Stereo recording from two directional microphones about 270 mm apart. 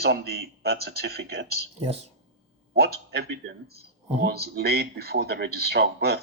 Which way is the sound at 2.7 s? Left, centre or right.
Right.